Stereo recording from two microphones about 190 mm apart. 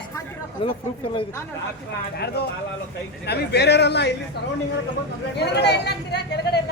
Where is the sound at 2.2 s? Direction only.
60° left (ahead or behind).